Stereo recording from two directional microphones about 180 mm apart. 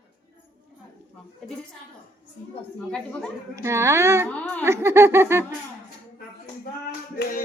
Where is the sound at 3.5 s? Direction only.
15° right (ahead or behind).